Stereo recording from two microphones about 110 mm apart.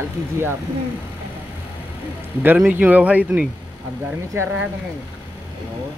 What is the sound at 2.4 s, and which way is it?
Speech, 15° right (ahead or behind).